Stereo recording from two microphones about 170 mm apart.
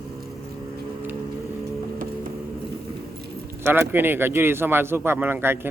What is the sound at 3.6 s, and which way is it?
Speech, 15° right (ahead or behind).